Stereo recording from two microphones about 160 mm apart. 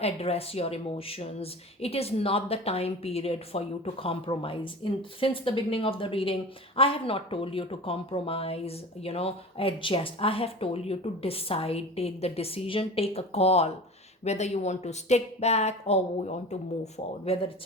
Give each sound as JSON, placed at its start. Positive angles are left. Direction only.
{"t": 0.0, "sound": "a woman's voice", "side_deg": 40}